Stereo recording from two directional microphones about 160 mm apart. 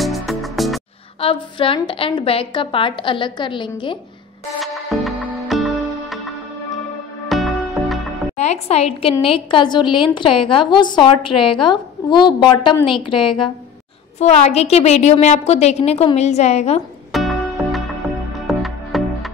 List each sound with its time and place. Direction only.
0.0 s music: centre (ahead or behind)
1.2 s a woman's voice: 35° left (ahead or behind)
4.6 s music: centre (ahead or behind)
8.4 s a woman's voice: 45° left (ahead or behind)
14.2 s a woman's voice: 45° left (ahead or behind)
17.1 s music: centre (ahead or behind)